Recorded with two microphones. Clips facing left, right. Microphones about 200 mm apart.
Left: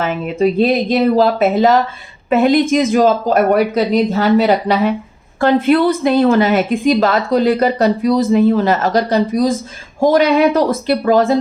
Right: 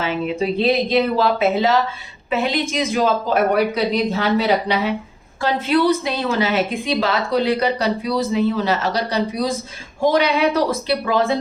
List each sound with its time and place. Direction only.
0.0 s a woman's voice: 50° left (ahead or behind)